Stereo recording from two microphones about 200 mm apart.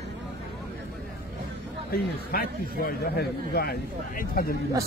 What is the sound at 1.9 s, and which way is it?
A man's voice, 45° left (ahead or behind).